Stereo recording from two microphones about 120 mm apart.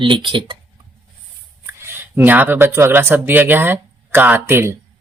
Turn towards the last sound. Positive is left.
turn(degrees=-20)  # may be behind; listen again after turning